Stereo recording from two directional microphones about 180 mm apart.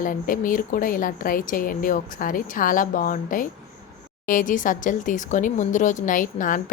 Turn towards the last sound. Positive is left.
turn(degrees=45)  # may be behind; listen again after turning